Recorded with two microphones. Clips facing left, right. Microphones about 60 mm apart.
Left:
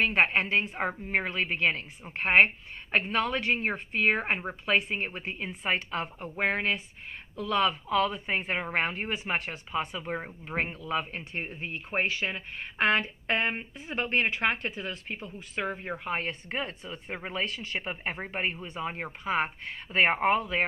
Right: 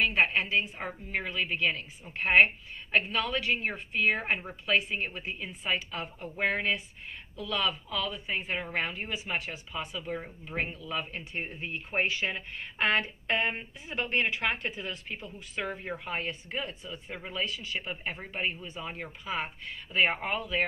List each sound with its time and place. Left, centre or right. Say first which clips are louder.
0.0 s speech: left 2 dB; left
5.5 s speech: left 3 dB; left